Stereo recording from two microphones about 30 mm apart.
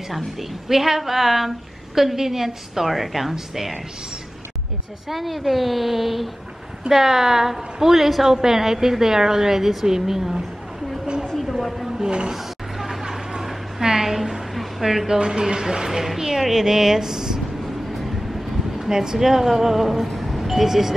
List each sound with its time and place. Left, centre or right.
0.1 s a woman's voice: centre
5.0 s a woman's voice: centre
6.9 s a woman's voice: centre
12.0 s speech: right
12.4 s a sound: centre
15.0 s a woman's voice: right
17.9 s vehicle: centre
18.9 s a woman's voice: centre
20.2 s a sound: centre